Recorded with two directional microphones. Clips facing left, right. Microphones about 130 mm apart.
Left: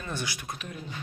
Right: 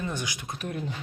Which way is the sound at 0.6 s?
50° right (ahead or behind).